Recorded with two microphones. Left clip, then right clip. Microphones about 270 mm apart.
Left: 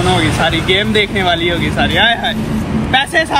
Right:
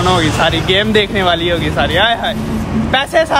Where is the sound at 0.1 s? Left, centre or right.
Centre.